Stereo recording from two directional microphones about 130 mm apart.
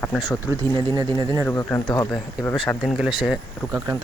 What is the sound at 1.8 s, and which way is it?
Speech, 35° left (ahead or behind).